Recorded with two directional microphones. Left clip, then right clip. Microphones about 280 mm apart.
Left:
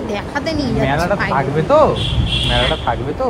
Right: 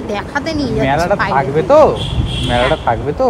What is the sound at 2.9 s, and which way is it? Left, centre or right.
Speech, right.